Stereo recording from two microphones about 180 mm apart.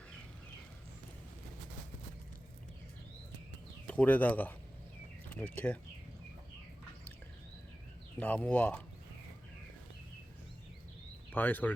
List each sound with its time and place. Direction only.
3.8 s speech: 10° left (ahead or behind)
8.2 s speech: 10° left (ahead or behind)
11.3 s speech: 10° left (ahead or behind)